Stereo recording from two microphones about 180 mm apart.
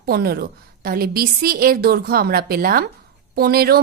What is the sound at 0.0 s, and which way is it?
A woman's voice, 60° right (ahead or behind).